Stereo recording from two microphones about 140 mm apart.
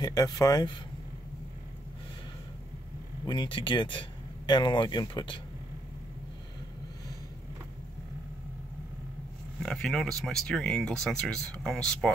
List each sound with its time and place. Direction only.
0.0 s speech: 25° left (ahead or behind)
3.3 s speech: 35° left (ahead or behind)
9.6 s speech: 5° left (ahead or behind)